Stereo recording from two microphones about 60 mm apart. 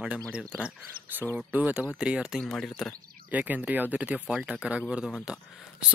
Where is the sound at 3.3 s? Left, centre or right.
Right.